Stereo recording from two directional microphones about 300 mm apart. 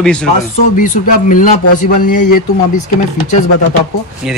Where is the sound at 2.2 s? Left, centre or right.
Left.